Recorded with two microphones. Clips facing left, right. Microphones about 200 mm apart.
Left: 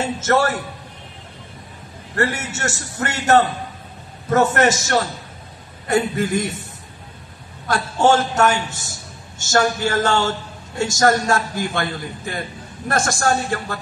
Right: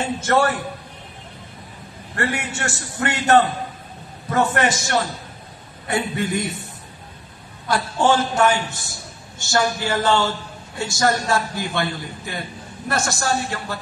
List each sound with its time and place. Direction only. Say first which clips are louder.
0.0 s a man's voice: left 1 dB; 40° left (ahead or behind)
2.1 s a man's voice: left 2 dB; 40° left (ahead or behind)
7.6 s a man's voice: left 2 dB; 45° left (ahead or behind)